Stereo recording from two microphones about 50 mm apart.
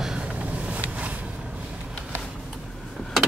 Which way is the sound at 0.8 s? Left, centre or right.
Right.